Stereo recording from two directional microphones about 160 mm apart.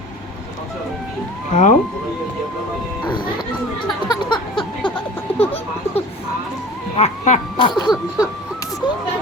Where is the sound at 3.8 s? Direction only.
30° left (ahead or behind).